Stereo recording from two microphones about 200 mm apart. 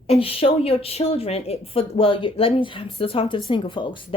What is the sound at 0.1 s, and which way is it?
A woman's voice, 30° left (ahead or behind).